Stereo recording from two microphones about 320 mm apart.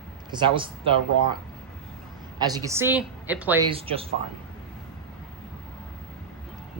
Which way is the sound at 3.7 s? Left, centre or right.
Centre.